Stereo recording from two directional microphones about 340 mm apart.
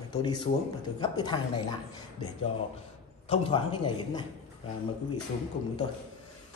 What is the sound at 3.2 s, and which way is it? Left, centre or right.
A man's voice, centre.